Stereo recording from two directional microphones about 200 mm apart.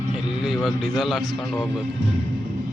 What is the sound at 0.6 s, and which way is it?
Speech, centre (ahead or behind).